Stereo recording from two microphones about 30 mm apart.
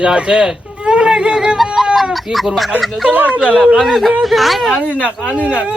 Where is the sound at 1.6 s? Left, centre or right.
Centre.